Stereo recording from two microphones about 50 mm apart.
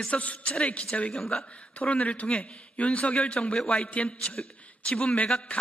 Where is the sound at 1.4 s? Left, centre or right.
Left.